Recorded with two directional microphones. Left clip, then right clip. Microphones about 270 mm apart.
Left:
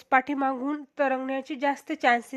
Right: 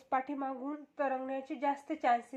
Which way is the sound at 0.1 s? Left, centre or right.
Left.